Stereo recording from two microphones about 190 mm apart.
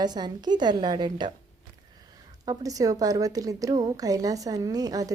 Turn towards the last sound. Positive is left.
turn(degrees=-20)  # may be behind; listen again after turning